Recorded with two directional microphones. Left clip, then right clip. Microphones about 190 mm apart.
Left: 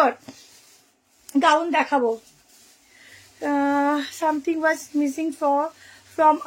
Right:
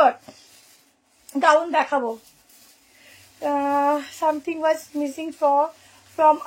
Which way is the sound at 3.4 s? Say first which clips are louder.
Right 1 dB; 35° left (ahead or behind).